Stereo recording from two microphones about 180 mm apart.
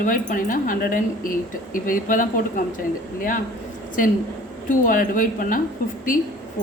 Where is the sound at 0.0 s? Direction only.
50° left (ahead or behind).